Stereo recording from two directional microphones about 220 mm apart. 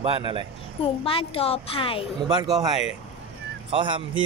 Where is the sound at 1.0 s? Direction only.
25° left (ahead or behind).